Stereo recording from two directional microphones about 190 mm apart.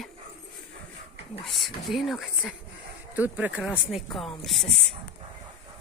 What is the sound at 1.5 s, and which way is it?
Speech, centre (ahead or behind).